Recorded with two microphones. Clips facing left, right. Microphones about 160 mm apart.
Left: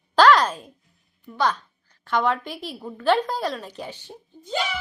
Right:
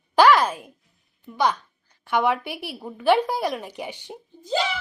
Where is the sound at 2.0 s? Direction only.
10° right (ahead or behind).